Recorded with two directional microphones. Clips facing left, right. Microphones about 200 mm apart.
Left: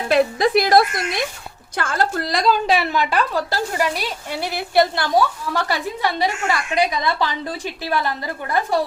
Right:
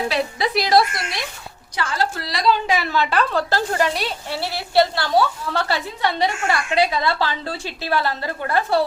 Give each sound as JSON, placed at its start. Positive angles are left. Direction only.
{"t": 0.1, "sound": "a woman's voice", "side_deg": 50}
{"t": 2.6, "sound": "a woman's voice", "side_deg": 30}
{"t": 2.9, "sound": "a woman's voice", "side_deg": 10}